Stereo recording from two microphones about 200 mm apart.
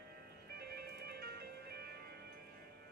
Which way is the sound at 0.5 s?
55° right (ahead or behind).